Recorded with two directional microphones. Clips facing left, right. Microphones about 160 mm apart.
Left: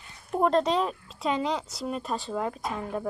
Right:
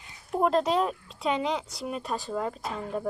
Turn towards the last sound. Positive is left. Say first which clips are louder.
# left 1 dB
turn(degrees=0)  # may be behind; listen again after turning